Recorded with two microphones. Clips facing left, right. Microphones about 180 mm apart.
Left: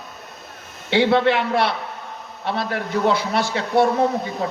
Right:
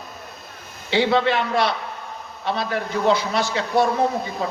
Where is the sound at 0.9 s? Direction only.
60° left (ahead or behind).